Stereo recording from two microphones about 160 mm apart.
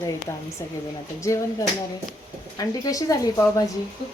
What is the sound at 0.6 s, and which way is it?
Speech, 25° left (ahead or behind).